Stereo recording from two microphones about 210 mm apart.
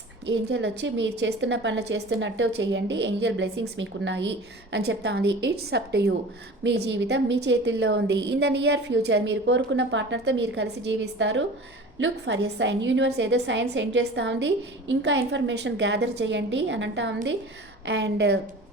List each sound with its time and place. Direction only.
0.3 s a woman's voice: 55° right (ahead or behind)